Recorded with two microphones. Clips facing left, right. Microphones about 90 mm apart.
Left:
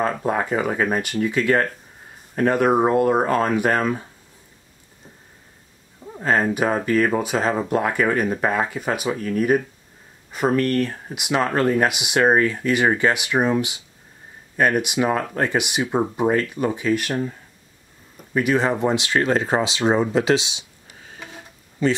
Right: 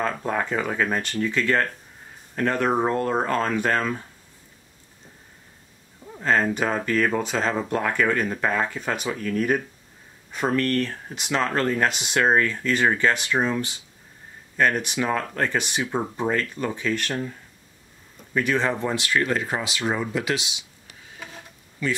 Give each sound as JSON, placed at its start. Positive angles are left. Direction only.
{"t": 0.2, "sound": "speech", "side_deg": 15}
{"t": 6.0, "sound": "speech", "side_deg": 15}
{"t": 21.3, "sound": "a sound", "side_deg": 25}